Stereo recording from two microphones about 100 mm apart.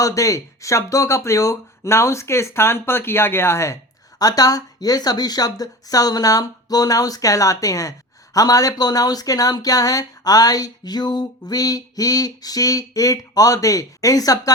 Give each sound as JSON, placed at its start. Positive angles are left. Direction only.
{"t": 0.0, "sound": "speech", "side_deg": 35}
{"t": 4.2, "sound": "speech", "side_deg": 40}